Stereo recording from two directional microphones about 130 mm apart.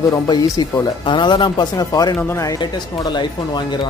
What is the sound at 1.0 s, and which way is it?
Speech, 40° left (ahead or behind).